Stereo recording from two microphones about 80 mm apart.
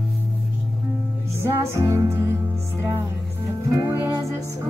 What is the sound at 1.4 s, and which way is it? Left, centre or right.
Music, right.